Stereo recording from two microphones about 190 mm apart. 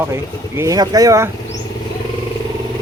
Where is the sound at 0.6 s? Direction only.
20° right (ahead or behind).